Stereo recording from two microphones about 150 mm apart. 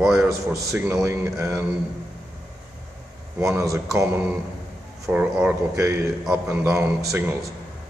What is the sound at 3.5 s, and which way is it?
A man's voice, 20° right (ahead or behind).